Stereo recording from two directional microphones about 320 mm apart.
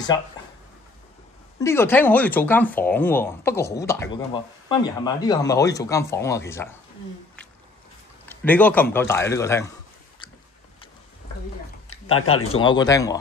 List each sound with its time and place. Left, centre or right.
0.1 s speech: centre
1.6 s speech: centre
8.3 s speech: centre
12.1 s speech: left
12.6 s speech: centre